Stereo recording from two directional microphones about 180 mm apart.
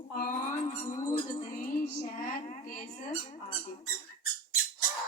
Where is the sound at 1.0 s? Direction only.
15° left (ahead or behind).